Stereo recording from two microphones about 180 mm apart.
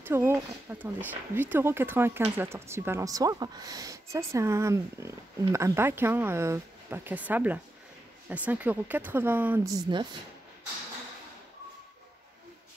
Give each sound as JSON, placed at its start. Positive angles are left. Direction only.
{"t": 0.0, "sound": "speech", "side_deg": -15}
{"t": 9.8, "sound": "speech", "side_deg": -25}